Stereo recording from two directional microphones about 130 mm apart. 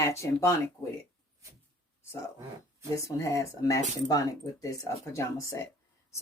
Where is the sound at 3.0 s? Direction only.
25° left (ahead or behind).